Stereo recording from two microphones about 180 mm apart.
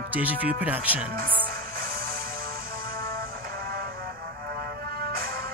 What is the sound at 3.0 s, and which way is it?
Music, 55° right (ahead or behind).